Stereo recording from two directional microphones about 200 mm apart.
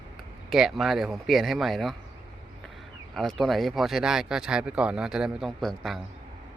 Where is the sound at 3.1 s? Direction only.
Centre (ahead or behind).